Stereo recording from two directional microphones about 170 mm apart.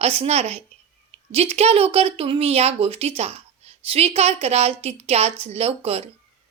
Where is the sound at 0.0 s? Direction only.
35° right (ahead or behind).